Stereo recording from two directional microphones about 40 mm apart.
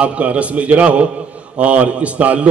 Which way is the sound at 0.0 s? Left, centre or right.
Right.